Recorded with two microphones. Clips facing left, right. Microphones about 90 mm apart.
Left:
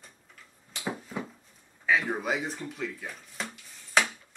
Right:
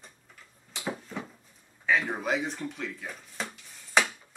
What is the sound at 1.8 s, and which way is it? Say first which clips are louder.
Speech: even; centre (ahead or behind).